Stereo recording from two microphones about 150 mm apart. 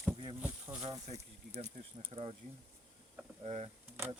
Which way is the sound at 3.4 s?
45° right (ahead or behind).